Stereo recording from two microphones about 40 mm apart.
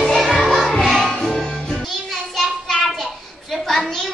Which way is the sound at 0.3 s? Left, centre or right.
Centre.